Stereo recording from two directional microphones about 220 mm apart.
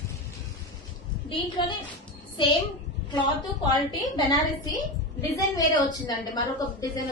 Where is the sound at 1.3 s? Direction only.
25° left (ahead or behind).